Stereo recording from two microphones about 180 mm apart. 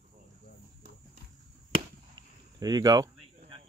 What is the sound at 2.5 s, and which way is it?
Cricket, 25° right (ahead or behind).